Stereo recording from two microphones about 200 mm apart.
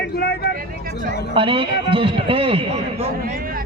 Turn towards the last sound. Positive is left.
turn(degrees=-45)  # may be behind; listen again after turning